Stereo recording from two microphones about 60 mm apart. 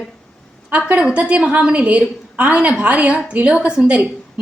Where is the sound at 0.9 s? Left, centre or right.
Centre.